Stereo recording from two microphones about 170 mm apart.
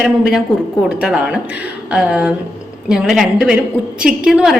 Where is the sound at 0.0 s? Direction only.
5° right (ahead or behind).